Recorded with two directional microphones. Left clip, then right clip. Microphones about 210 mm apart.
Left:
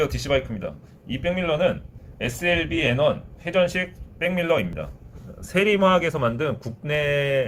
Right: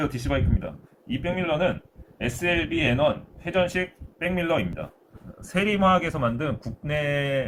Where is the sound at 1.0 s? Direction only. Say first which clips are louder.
Left 3 dB; 50° left (ahead or behind).